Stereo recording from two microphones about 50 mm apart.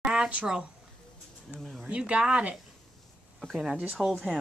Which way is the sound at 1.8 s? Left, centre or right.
Right.